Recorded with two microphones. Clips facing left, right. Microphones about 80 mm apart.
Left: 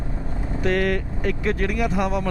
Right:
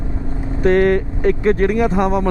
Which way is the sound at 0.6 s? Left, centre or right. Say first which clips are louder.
Right 9 dB; right.